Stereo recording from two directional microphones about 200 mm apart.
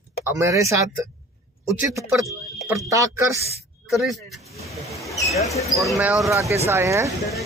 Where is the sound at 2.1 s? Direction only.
Centre (ahead or behind).